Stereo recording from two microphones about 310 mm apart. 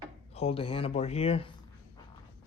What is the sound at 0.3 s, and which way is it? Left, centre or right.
Speech, centre.